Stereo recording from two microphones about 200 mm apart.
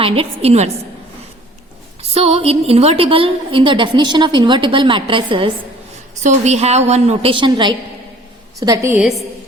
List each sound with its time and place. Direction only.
0.0 s a woman's voice: 30° right (ahead or behind)
2.0 s a woman's voice: 30° right (ahead or behind); by 9.2 s 5° right (ahead or behind)